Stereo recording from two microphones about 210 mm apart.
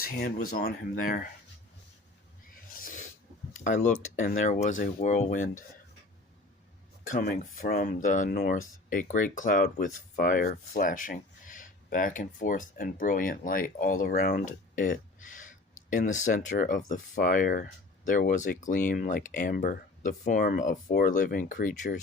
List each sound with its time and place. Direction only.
0.0 s speech: 45° left (ahead or behind)
2.7 s filing: 40° left (ahead or behind)
3.5 s speech: 35° left (ahead or behind)
7.1 s speech: 35° left (ahead or behind)